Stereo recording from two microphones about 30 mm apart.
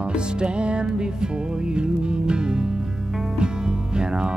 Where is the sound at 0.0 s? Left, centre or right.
Right.